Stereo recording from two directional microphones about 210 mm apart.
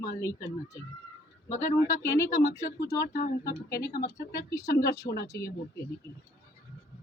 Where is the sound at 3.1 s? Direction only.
45° left (ahead or behind).